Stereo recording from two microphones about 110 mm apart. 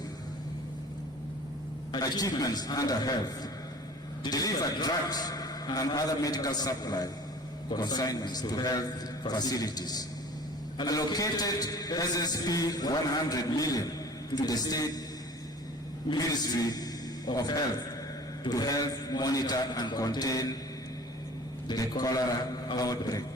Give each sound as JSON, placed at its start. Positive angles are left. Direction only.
{"t": 1.9, "sound": "a man's voice", "side_deg": 35}
{"t": 16.0, "sound": "a man's voice", "side_deg": 40}
{"t": 21.7, "sound": "a man's voice", "side_deg": 35}